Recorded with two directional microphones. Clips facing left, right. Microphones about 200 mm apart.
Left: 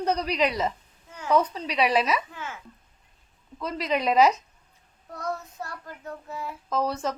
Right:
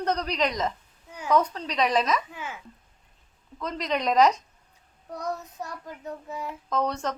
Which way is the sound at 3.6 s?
5° left (ahead or behind).